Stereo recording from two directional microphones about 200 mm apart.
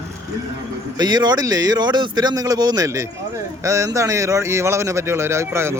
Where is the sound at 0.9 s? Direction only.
20° right (ahead or behind).